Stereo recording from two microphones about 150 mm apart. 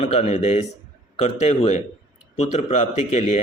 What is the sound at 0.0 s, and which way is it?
Speech, 45° left (ahead or behind).